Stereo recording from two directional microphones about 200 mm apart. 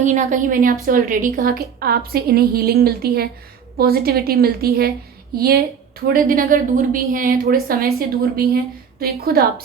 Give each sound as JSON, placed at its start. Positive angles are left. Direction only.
{"t": 0.0, "sound": "a woman's voice", "side_deg": -35}